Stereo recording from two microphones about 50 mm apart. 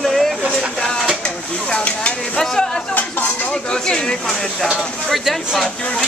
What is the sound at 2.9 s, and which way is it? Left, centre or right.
Dishes, left.